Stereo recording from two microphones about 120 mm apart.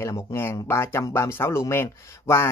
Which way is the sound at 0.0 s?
25° left (ahead or behind).